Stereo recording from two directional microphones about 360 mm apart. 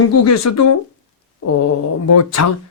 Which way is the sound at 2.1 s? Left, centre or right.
Left.